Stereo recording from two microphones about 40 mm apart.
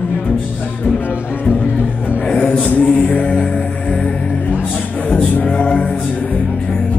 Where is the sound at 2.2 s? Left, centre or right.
Left.